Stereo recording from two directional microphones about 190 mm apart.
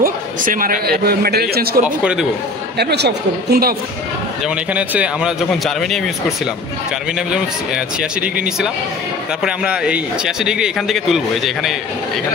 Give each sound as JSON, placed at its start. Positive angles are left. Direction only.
{"t": 0.0, "sound": "a man's voice", "side_deg": -45}
{"t": 1.9, "sound": "a man's voice", "side_deg": -5}
{"t": 2.8, "sound": "a woman's voice", "side_deg": -60}
{"t": 4.7, "sound": "a man's voice", "side_deg": -5}